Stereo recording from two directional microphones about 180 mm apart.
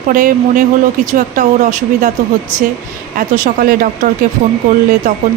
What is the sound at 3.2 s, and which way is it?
Speech, 50° right (ahead or behind).